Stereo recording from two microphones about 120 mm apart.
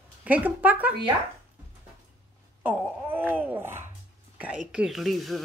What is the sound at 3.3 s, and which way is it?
Speech, 15° right (ahead or behind).